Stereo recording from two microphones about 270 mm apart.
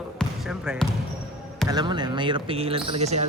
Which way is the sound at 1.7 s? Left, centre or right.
Centre.